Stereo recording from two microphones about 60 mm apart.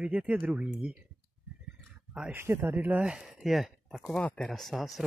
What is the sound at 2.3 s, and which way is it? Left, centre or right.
Speech, right.